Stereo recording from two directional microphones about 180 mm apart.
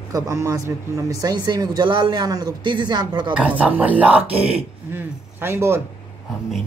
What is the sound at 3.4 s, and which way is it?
Speech, 10° right (ahead or behind).